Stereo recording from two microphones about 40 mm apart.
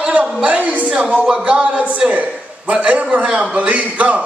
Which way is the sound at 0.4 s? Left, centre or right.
Right.